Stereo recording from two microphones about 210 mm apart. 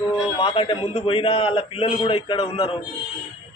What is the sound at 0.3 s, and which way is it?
A man's voice, 25° left (ahead or behind).